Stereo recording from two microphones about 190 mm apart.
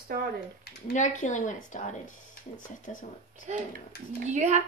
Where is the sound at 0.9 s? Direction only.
40° left (ahead or behind).